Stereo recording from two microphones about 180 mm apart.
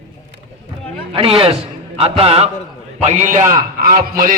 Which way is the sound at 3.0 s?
40° right (ahead or behind).